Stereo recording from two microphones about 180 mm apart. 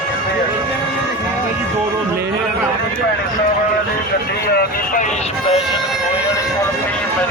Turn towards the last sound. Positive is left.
turn(degrees=35)  # may be behind; listen again after turning